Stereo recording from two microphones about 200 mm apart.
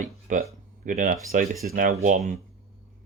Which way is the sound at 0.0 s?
40° right (ahead or behind).